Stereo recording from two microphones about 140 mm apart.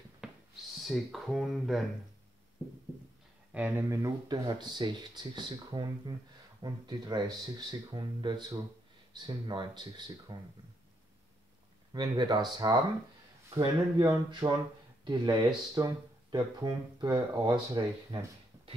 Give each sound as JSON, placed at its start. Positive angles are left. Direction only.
{"t": 0.2, "sound": "a sound", "side_deg": -5}
{"t": 0.7, "sound": "speech", "side_deg": 0}
{"t": 3.5, "sound": "speech", "side_deg": -15}
{"t": 4.3, "sound": "speech", "side_deg": -30}
{"t": 11.9, "sound": "speech", "side_deg": -30}